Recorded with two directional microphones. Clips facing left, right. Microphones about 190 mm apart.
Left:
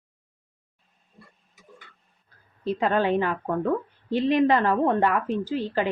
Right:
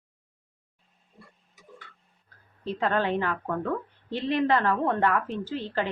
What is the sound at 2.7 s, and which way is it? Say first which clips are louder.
Speech: left 4 dB; 15° left (ahead or behind).